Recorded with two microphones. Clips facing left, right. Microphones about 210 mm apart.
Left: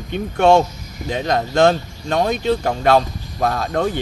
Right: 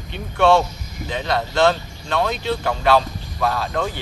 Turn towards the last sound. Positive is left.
turn(degrees=45)  # may be behind; listen again after turning